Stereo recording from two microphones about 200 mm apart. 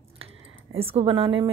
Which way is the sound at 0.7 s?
30° right (ahead or behind).